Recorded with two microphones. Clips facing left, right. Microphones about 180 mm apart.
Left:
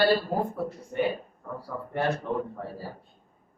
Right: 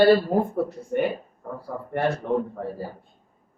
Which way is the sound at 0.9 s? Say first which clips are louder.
Right 2 dB; 55° right (ahead or behind).